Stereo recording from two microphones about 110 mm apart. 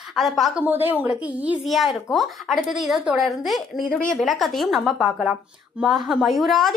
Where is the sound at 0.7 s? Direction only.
15° right (ahead or behind).